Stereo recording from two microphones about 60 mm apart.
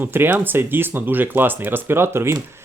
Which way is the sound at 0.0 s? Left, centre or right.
Right.